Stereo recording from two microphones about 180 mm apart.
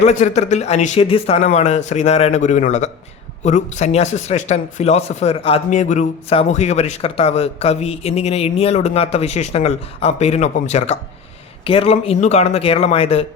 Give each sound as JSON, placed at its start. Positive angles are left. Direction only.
{"t": 0.0, "sound": "speech", "side_deg": 40}